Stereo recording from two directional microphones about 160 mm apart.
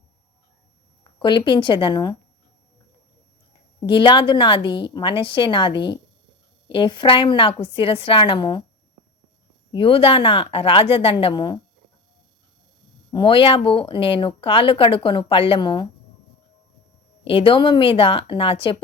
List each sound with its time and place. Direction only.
1.2 s a woman's voice: 30° left (ahead or behind)
3.8 s speech: 30° left (ahead or behind)
9.7 s speech: 35° left (ahead or behind)
13.1 s speech: 30° left (ahead or behind)
17.2 s speech: 35° left (ahead or behind)